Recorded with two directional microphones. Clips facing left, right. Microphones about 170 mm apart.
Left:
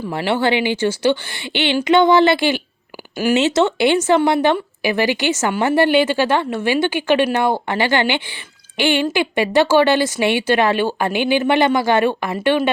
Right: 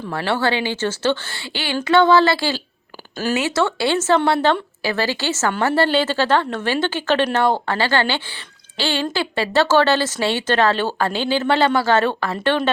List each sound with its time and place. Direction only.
0.1 s speech: 15° left (ahead or behind)